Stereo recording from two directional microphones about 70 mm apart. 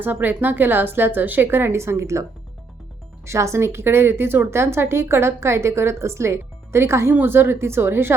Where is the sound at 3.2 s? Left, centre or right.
Right.